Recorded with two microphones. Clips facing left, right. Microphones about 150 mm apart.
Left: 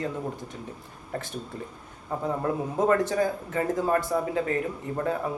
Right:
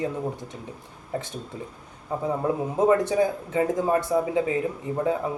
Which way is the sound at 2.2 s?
15° right (ahead or behind).